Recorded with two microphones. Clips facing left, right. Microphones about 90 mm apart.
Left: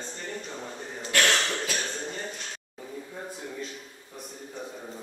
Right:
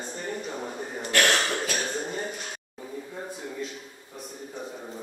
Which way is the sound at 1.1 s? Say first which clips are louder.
Right 1 dB; 40° right (ahead or behind).